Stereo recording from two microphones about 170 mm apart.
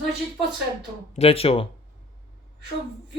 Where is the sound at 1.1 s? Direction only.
35° left (ahead or behind).